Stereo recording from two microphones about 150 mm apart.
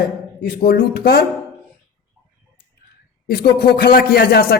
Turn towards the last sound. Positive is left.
turn(degrees=90)